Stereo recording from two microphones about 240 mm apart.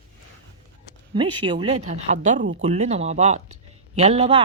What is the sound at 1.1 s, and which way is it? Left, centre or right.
A woman's voice, centre.